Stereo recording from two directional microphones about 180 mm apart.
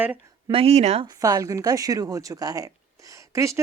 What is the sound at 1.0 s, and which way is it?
Speech, 20° right (ahead or behind).